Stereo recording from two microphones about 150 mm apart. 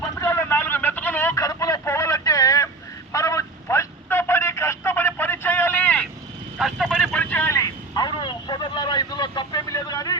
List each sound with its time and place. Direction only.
0.2 s vehicle: 20° left (ahead or behind)
3.1 s telephone: 20° left (ahead or behind)
6.6 s vehicle: centre (ahead or behind); by 10.2 s 25° left (ahead or behind)